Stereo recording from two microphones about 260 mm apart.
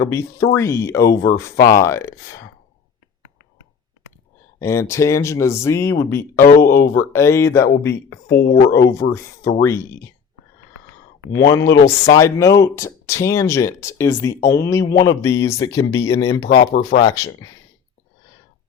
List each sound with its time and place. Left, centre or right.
0.0 s speech: centre
4.6 s speech: centre
8.3 s speech: left
8.7 s speech: centre
11.7 s speech: left
12.1 s speech: centre
16.2 s speech: left
16.6 s speech: left
17.1 s speech: centre